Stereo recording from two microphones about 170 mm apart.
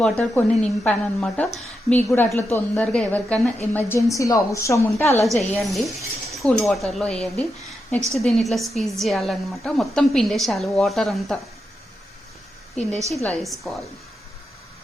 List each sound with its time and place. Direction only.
0.0 s a woman's voice: 5° left (ahead or behind)
5.2 s a woman's voice: centre (ahead or behind)
13.1 s a woman's voice: centre (ahead or behind)